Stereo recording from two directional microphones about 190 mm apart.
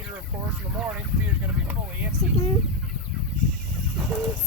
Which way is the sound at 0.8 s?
5° right (ahead or behind).